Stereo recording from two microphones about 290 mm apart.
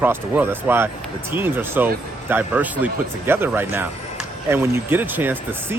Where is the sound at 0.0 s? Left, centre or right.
Centre.